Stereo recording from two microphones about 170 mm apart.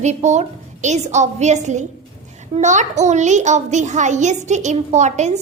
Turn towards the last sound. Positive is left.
turn(degrees=-45)  # may be behind; listen again after turning